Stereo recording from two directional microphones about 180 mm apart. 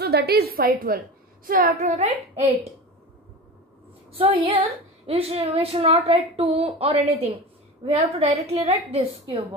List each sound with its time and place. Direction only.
0.0 s a woman's voice: 60° right (ahead or behind); by 2.5 s 40° right (ahead or behind)
4.2 s a woman's voice: 35° right (ahead or behind)